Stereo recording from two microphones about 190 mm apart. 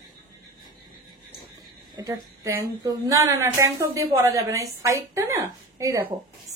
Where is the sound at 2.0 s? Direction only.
20° right (ahead or behind).